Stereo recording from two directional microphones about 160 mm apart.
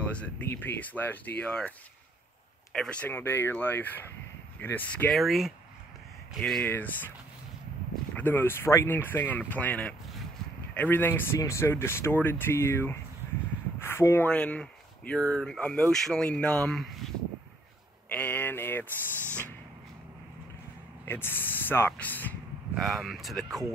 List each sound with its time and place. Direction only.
0.1 s speech: 10° left (ahead or behind)
2.7 s speech: 5° left (ahead or behind)
8.1 s speech: 10° left (ahead or behind)
18.1 s speech: 10° left (ahead or behind)
21.0 s speech: 15° left (ahead or behind)
22.8 s speech: centre (ahead or behind)